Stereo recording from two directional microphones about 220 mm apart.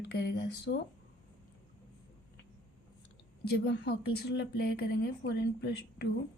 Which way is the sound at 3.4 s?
50° left (ahead or behind).